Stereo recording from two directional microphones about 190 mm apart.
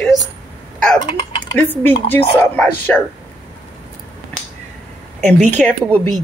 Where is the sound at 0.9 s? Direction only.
25° left (ahead or behind).